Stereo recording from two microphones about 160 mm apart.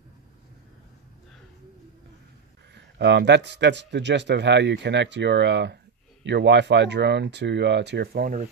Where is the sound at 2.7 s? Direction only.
90° right; by 8.3 s 70° right (ahead or behind).